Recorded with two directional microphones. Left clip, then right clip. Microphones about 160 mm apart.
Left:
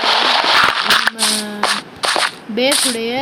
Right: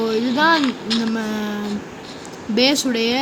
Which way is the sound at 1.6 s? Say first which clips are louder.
Left 13 dB; 90° left.